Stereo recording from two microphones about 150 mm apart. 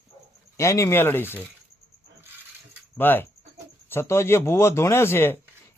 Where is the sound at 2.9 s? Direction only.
15° left (ahead or behind).